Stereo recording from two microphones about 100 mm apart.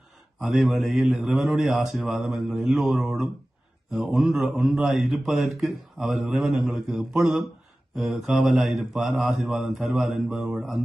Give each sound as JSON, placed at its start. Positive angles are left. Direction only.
{"t": 0.4, "sound": "a man's voice", "side_deg": 0}